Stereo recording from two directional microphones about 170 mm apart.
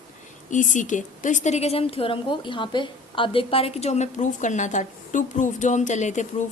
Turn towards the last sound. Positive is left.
turn(degrees=45)  # may be behind; listen again after turning